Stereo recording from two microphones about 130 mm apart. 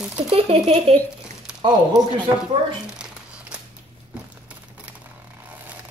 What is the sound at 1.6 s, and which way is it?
Speech, 35° right (ahead or behind).